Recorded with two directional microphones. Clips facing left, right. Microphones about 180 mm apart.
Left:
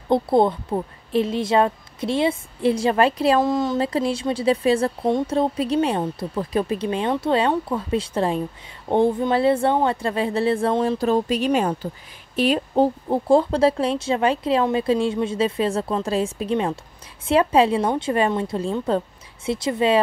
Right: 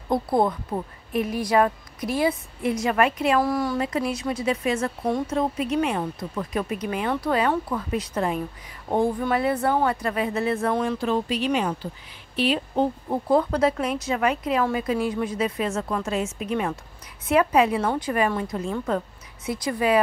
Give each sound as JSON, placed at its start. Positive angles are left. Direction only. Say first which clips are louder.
{"t": 0.1, "sound": "speech", "louder": "left 4 dB", "side_deg": 25}
{"t": 3.4, "sound": "speech", "louder": "left 3 dB", "side_deg": 20}
{"t": 13.1, "sound": "speech", "louder": "left 3 dB", "side_deg": 30}